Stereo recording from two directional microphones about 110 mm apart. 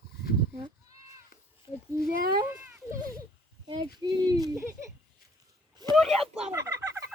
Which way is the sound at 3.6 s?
45° right (ahead or behind).